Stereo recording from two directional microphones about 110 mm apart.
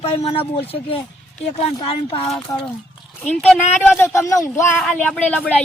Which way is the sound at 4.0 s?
25° left (ahead or behind).